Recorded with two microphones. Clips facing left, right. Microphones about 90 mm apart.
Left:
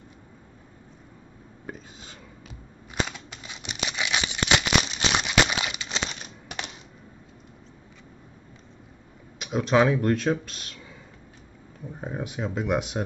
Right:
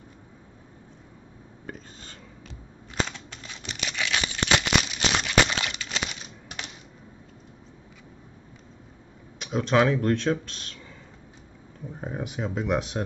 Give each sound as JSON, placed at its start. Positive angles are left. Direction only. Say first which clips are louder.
{"t": 1.7, "sound": "a sound", "louder": "left 1 dB", "side_deg": 10}
{"t": 9.4, "sound": "speech", "louder": "left 1 dB", "side_deg": 5}
{"t": 12.0, "sound": "speech", "louder": "even", "side_deg": 0}